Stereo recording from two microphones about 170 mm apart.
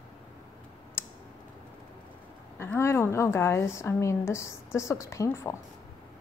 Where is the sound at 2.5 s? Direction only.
15° left (ahead or behind).